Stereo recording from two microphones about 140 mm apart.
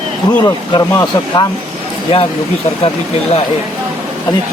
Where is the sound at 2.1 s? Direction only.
40° left (ahead or behind).